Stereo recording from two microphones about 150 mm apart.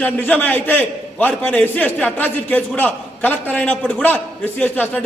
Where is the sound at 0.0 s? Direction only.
10° left (ahead or behind).